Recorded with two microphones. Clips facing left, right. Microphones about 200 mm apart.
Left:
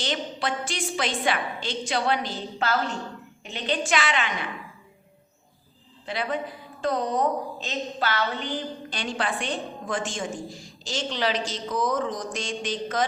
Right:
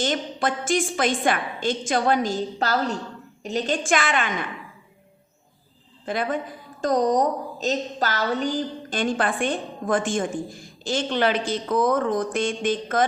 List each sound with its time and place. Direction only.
0.0 s a woman's voice: 50° right (ahead or behind)
6.1 s a woman's voice: 50° right (ahead or behind)